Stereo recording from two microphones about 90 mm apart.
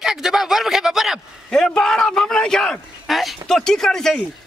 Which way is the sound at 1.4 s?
5° left (ahead or behind).